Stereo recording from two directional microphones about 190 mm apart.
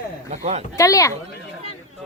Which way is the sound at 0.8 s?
15° left (ahead or behind).